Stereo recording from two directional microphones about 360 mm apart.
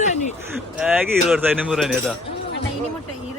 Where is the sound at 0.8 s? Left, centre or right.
Centre.